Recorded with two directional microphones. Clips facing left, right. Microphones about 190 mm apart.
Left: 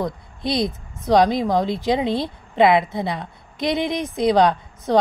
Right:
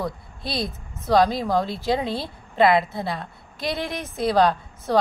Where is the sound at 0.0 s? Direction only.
20° left (ahead or behind).